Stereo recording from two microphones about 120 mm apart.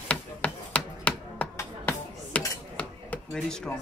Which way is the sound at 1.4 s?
10° left (ahead or behind).